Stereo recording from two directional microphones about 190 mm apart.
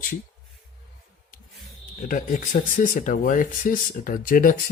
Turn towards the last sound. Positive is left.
turn(degrees=50)  # may be behind; listen again after turning